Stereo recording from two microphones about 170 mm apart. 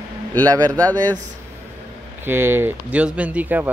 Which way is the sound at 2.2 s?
15° right (ahead or behind).